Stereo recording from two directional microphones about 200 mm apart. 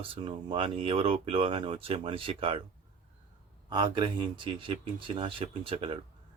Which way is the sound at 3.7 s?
20° right (ahead or behind).